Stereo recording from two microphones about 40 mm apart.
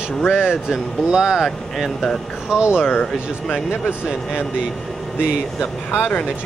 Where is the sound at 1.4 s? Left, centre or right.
Centre.